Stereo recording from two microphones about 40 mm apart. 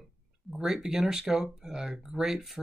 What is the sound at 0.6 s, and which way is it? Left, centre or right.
Speech, centre.